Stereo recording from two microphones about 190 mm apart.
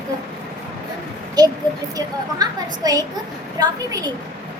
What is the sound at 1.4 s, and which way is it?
A woman's voice, 20° right (ahead or behind).